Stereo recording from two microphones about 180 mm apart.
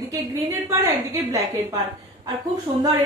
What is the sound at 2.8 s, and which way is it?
Speech, 20° right (ahead or behind).